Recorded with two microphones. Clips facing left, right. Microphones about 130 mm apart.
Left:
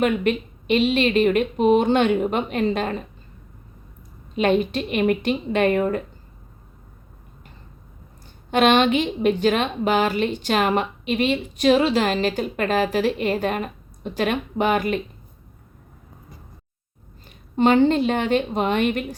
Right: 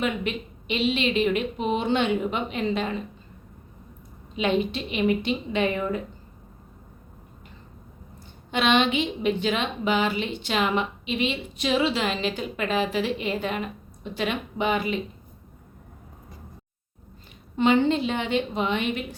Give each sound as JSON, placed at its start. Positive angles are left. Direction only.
{"t": 0.0, "sound": "a woman's voice", "side_deg": 50}
{"t": 4.4, "sound": "a woman's voice", "side_deg": 50}
{"t": 8.4, "sound": "a woman's voice", "side_deg": 50}
{"t": 17.6, "sound": "a woman's voice", "side_deg": 45}